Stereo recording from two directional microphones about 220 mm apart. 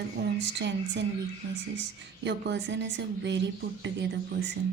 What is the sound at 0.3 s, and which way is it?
Speech, 55° right (ahead or behind).